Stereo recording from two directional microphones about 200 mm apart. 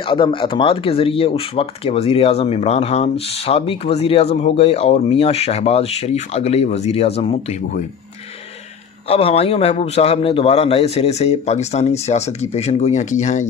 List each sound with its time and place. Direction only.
0.1 s speech: 25° left (ahead or behind)
9.1 s speech: 30° left (ahead or behind)